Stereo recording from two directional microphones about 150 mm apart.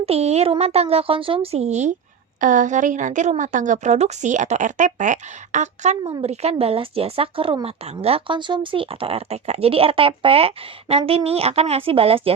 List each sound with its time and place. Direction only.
0.0 s speech: 45° right (ahead or behind)
2.4 s speech: 60° right (ahead or behind)
6.0 s a woman's voice: 30° right (ahead or behind)
6.2 s speech: 45° right (ahead or behind)